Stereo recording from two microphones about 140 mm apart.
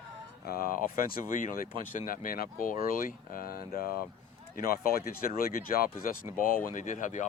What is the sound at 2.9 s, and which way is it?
Speech, 80° left.